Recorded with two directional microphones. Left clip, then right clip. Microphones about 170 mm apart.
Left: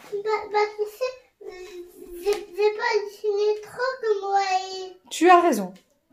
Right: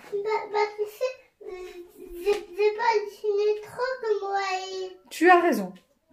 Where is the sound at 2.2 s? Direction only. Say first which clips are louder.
Left 1 dB; 25° right (ahead or behind).